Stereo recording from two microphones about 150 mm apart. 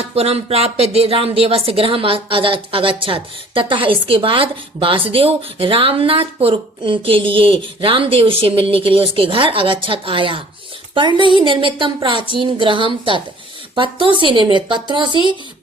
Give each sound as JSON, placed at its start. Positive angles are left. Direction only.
{"t": 0.0, "sound": "speech", "side_deg": -40}